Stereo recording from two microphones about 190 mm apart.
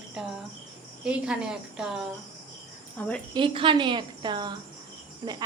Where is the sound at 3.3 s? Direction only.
25° right (ahead or behind).